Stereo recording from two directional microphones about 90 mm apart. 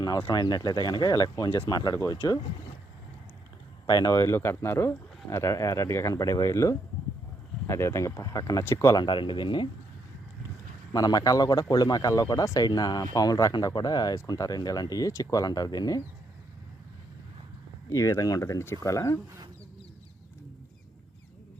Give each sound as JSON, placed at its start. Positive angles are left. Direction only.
{"t": 0.3, "sound": "speech", "side_deg": 50}
{"t": 1.1, "sound": "speech", "side_deg": 40}
{"t": 1.5, "sound": "speech", "side_deg": 75}
{"t": 1.7, "sound": "speech", "side_deg": 45}
{"t": 3.8, "sound": "speech", "side_deg": 45}
{"t": 4.2, "sound": "speech", "side_deg": 25}
{"t": 9.0, "sound": "speech", "side_deg": 60}
{"t": 10.9, "sound": "speech", "side_deg": 45}
{"t": 17.9, "sound": "speech", "side_deg": 35}